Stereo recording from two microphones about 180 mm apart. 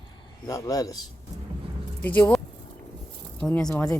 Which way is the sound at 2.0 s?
10° left (ahead or behind).